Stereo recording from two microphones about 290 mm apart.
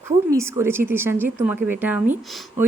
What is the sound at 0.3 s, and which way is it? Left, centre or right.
Speech, centre.